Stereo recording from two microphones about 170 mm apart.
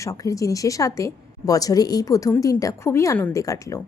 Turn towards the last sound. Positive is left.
turn(degrees=20)  # may be behind; listen again after turning